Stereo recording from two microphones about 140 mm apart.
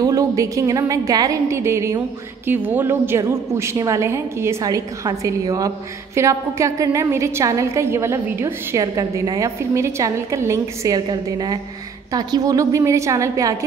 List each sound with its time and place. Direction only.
0.0 s a woman's voice: 25° right (ahead or behind)